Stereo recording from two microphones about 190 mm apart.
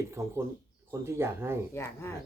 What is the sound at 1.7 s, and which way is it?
Speech, 15° left (ahead or behind).